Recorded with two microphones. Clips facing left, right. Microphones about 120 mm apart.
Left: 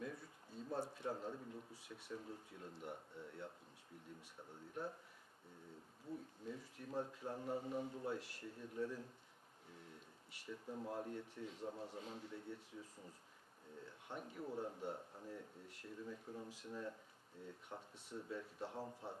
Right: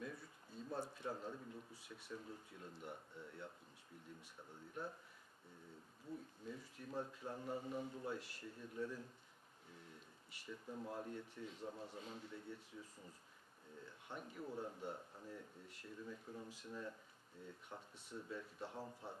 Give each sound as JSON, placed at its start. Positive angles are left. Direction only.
{"t": 0.0, "sound": "a sound", "side_deg": 40}
{"t": 0.7, "sound": "a man's voice", "side_deg": 35}
{"t": 6.5, "sound": "a man's voice", "side_deg": 40}
{"t": 8.2, "sound": "a man's voice", "side_deg": 50}
{"t": 10.5, "sound": "a man's voice", "side_deg": 30}
{"t": 11.6, "sound": "speech", "side_deg": 25}
{"t": 11.9, "sound": "a man's voice", "side_deg": 40}
{"t": 13.8, "sound": "a man's voice", "side_deg": 30}
{"t": 18.8, "sound": "speech", "side_deg": 20}